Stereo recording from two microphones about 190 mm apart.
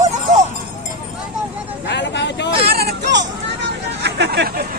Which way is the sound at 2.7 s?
60° right (ahead or behind).